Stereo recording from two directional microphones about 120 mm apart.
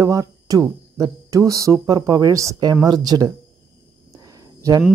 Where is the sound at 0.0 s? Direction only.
30° right (ahead or behind).